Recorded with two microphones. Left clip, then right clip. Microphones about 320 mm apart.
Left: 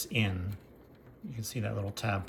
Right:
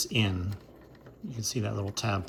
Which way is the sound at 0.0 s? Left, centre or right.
Centre.